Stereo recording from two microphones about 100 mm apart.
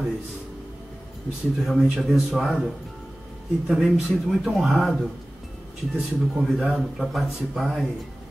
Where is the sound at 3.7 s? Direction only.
Centre (ahead or behind).